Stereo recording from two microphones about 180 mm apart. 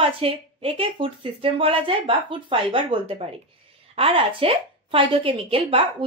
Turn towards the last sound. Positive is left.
turn(degrees=-30)  # may be behind; listen again after turning